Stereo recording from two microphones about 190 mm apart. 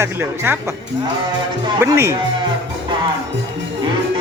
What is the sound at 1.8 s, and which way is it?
Speech, 15° right (ahead or behind).